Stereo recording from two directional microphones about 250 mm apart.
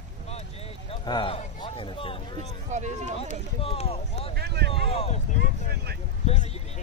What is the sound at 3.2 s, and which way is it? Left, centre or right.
Speech, left.